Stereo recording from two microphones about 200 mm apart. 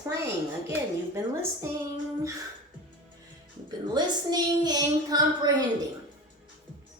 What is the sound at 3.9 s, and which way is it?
Child singing, 20° right (ahead or behind).